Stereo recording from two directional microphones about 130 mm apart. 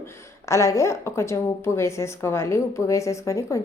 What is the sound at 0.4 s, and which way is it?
A woman's voice, 25° left (ahead or behind).